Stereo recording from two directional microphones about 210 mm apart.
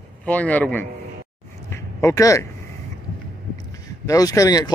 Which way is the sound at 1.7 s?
15° left (ahead or behind).